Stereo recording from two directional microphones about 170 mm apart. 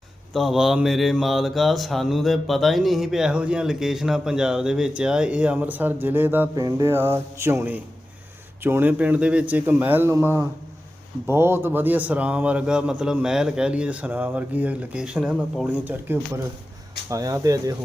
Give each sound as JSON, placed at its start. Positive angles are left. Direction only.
{"t": 0.3, "sound": "mantra", "side_deg": 0}
{"t": 6.7, "sound": "a man's voice", "side_deg": -20}